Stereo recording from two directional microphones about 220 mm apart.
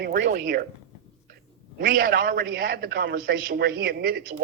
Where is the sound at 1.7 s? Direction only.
40° right (ahead or behind).